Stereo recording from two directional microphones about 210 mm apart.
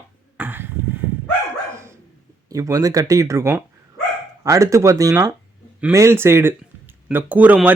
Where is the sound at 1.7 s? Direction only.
15° right (ahead or behind).